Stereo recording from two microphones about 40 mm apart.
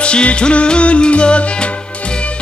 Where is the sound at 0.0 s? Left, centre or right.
Left.